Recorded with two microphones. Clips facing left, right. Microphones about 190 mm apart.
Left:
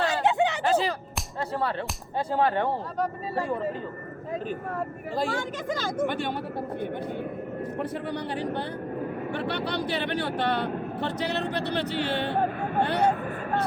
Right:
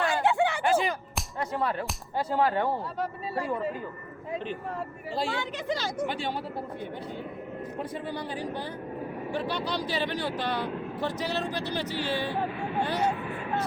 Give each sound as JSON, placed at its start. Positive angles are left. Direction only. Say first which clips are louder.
{"t": 0.0, "sound": "a sound", "louder": "left 1 dB", "side_deg": 20}
{"t": 0.6, "sound": "whip", "louder": "left 1 dB", "side_deg": 35}
{"t": 1.4, "sound": "music", "louder": "left 1 dB", "side_deg": 30}
{"t": 2.1, "sound": "whip", "louder": "left 1 dB", "side_deg": 30}
{"t": 4.3, "sound": "speech", "louder": "left 2 dB", "side_deg": 50}
{"t": 7.8, "sound": "speech", "louder": "left 2 dB", "side_deg": 65}